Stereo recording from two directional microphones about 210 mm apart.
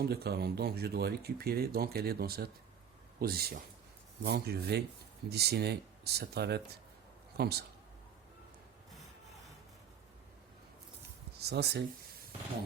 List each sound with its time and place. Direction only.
0.0 s speech: 50° right (ahead or behind)
11.3 s speech: 50° right (ahead or behind)